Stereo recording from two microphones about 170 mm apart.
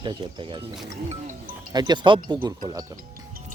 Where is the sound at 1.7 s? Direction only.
25° right (ahead or behind).